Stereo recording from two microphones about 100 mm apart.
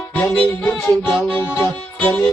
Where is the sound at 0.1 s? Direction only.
20° left (ahead or behind).